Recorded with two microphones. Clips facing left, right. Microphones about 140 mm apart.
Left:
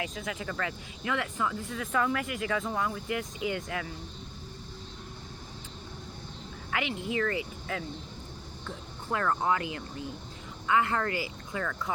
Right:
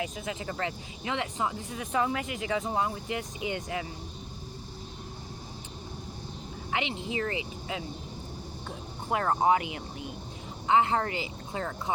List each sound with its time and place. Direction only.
0.2 s speech: 25° right (ahead or behind)
6.7 s speech: 25° right (ahead or behind)
9.1 s speech: 20° right (ahead or behind)
11.6 s speech: 35° right (ahead or behind)